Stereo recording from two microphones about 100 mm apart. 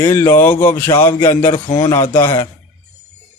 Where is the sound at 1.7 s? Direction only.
40° left (ahead or behind).